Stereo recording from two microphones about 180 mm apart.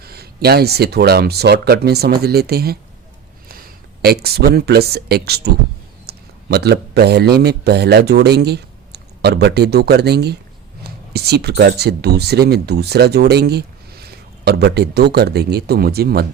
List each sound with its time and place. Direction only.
0.0 s a man's voice: 60° right (ahead or behind)